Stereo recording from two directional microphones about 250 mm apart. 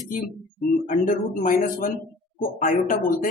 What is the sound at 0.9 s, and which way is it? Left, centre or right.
A woman's voice, left.